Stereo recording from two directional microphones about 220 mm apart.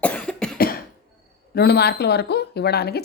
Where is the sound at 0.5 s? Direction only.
45° left (ahead or behind).